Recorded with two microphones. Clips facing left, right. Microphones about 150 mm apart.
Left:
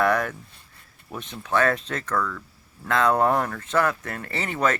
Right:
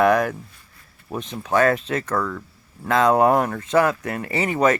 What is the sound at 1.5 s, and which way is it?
Speech, 10° right (ahead or behind).